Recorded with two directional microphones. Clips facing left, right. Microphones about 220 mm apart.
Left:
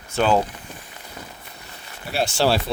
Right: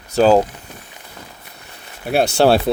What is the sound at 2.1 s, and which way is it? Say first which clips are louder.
Speech: right 7 dB; 60° right (ahead or behind).